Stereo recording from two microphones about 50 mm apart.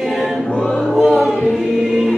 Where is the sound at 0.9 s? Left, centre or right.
Centre.